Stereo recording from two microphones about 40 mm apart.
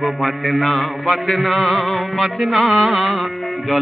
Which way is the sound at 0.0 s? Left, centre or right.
Centre.